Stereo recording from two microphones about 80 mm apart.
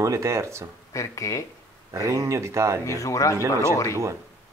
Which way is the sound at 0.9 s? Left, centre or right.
Left.